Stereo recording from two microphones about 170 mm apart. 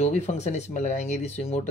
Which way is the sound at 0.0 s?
40° left (ahead or behind).